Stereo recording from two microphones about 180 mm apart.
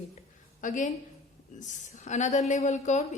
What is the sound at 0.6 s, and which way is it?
A woman's voice, 45° left (ahead or behind).